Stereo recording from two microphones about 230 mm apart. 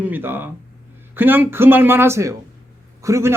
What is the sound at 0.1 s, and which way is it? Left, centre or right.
A man's voice, centre.